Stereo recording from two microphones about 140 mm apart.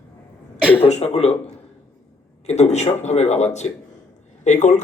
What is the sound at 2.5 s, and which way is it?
Speech, 50° left (ahead or behind).